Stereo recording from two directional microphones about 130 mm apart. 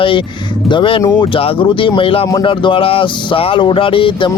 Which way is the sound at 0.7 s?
40° left (ahead or behind).